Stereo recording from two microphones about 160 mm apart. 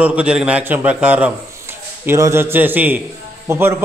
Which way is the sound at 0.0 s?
10° right (ahead or behind).